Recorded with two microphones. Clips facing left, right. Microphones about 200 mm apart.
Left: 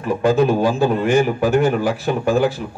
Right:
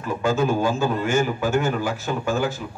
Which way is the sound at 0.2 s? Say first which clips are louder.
Left 5 dB; 35° left (ahead or behind).